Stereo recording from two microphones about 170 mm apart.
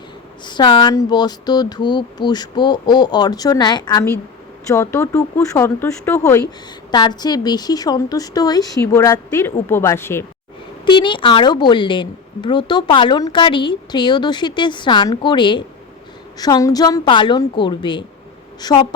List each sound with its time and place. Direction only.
0.4 s a woman's voice: 25° left (ahead or behind)
10.8 s a woman's voice: 30° left (ahead or behind)